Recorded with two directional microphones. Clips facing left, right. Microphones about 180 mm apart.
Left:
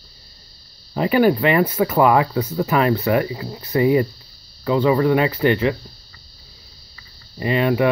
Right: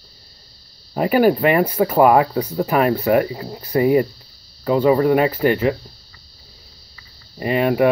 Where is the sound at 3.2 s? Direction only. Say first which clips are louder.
Right 1 dB; 45° right (ahead or behind).